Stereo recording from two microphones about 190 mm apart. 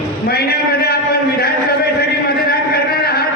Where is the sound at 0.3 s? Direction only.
55° left (ahead or behind).